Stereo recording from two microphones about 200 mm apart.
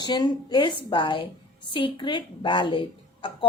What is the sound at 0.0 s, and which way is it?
A woman's voice, 20° left (ahead or behind).